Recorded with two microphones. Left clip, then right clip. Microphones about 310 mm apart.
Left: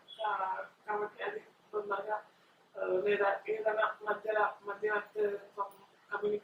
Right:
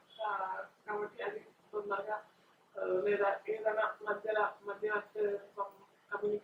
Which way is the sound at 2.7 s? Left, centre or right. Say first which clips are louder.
Left 1 dB; centre.